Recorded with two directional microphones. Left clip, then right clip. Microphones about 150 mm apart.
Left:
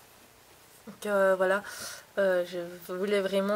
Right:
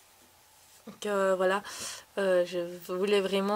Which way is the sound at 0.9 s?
20° right (ahead or behind).